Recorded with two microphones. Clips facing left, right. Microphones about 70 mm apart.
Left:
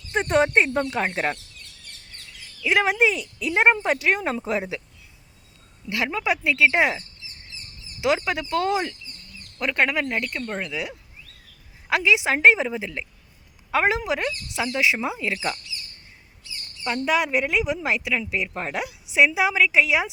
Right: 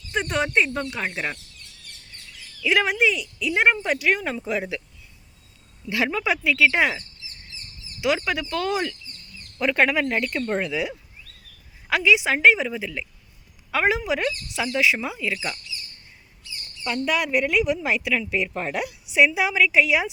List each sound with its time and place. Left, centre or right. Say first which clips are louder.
0.1 s speech: left 4 dB; left
2.6 s speech: left 1 dB; left
6.1 s speech: left 2 dB; centre
8.0 s speech: left 1 dB; left
9.6 s speech: right 2 dB; centre
11.9 s speech: right 1 dB; centre
16.8 s speech: left 1 dB; left; by 18.5 s centre
18.7 s speech: right 1 dB; left